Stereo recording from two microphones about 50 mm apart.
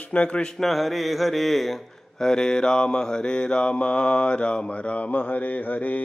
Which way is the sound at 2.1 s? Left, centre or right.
Centre.